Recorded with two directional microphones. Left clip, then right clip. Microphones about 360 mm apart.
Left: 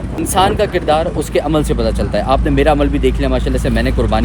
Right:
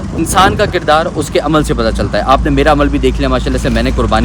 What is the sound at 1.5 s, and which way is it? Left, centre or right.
Speech, right.